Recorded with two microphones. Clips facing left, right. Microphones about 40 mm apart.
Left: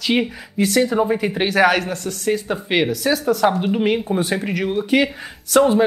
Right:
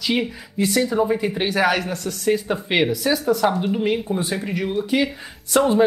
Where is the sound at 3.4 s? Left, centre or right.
Centre.